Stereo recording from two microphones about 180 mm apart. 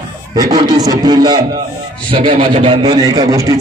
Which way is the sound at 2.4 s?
30° right (ahead or behind).